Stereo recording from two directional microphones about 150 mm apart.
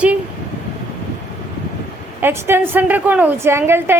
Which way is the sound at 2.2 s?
15° right (ahead or behind).